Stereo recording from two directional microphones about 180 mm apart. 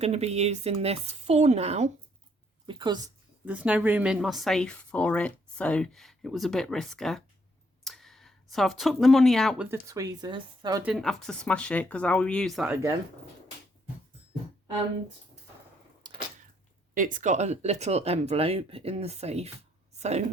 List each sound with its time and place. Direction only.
0.0 s speech: 35° right (ahead or behind)
2.6 s speech: 25° right (ahead or behind)
3.4 s a woman's voice: 10° right (ahead or behind)
9.6 s speech: 15° right (ahead or behind)
10.8 s a woman's voice: centre (ahead or behind)
16.0 s a sound: 25° right (ahead or behind)
16.9 s a woman's voice: 45° right (ahead or behind)